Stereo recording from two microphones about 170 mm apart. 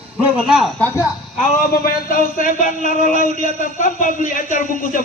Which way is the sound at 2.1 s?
55° left (ahead or behind).